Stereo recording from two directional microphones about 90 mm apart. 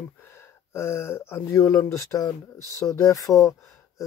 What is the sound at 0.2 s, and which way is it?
Speech, 25° left (ahead or behind).